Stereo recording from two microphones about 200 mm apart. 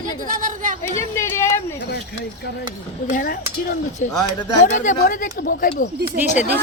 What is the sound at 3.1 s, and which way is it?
Speech, 45° left (ahead or behind).